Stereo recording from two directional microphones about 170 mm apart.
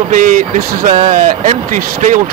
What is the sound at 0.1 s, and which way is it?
Speech, 50° right (ahead or behind).